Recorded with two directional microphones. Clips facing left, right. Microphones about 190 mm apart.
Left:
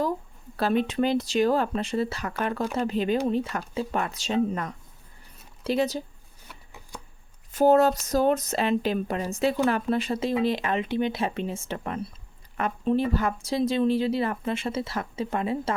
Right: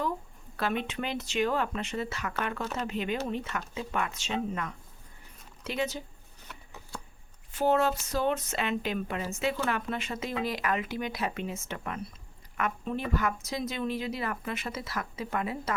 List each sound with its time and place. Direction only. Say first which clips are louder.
0.5 s speech: left 7 dB; 35° left (ahead or behind)
7.5 s speech: left 7 dB; 40° left (ahead or behind)